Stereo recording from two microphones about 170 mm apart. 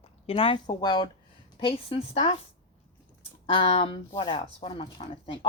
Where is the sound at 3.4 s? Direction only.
30° left (ahead or behind).